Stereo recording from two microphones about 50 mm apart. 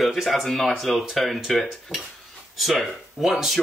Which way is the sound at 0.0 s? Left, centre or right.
Centre.